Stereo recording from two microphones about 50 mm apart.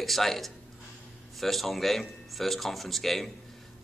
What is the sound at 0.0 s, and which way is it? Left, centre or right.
A man's voice, centre.